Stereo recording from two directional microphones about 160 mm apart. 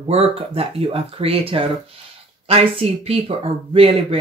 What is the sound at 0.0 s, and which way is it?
Speech, 35° right (ahead or behind).